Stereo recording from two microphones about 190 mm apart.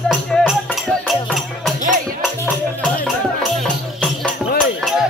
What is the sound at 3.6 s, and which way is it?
Music, 5° left (ahead or behind).